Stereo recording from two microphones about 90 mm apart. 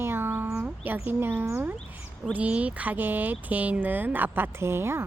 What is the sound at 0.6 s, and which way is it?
Speech, 25° right (ahead or behind).